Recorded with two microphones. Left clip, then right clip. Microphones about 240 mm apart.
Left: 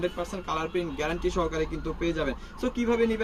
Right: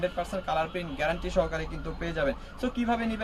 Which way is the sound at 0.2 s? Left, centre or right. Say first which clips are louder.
Right 2 dB; centre.